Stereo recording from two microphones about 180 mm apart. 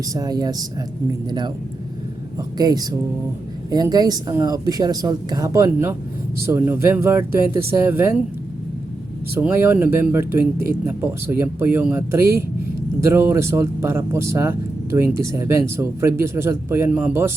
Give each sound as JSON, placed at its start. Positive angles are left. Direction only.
{"t": 0.1, "sound": "a woman's voice", "side_deg": -20}
{"t": 2.6, "sound": "a woman's voice", "side_deg": -20}
{"t": 9.3, "sound": "speech", "side_deg": -10}